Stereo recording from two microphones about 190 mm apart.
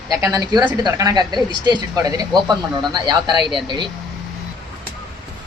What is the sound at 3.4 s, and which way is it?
Speech, centre (ahead or behind).